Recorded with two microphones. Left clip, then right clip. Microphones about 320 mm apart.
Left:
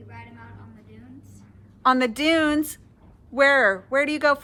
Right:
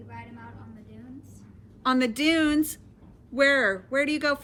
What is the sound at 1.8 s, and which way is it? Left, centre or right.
Speech, centre.